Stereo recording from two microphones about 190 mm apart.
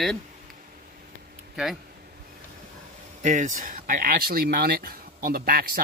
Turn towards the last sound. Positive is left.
turn(degrees=-50)  # may be behind; listen again after turning